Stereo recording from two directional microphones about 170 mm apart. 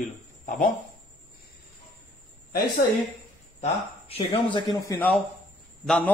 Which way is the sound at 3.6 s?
35° left (ahead or behind).